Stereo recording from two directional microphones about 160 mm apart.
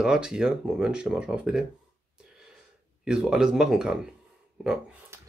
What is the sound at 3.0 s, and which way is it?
Speech, 5° right (ahead or behind).